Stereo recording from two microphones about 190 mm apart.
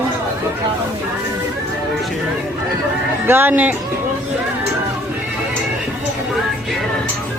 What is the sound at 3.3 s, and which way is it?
Speech, 10° right (ahead or behind).